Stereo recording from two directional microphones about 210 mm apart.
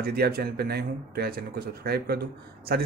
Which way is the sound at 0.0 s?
45° right (ahead or behind).